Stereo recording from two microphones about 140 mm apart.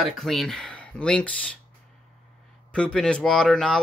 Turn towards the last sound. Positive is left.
turn(degrees=5)  # may be behind; listen again after turning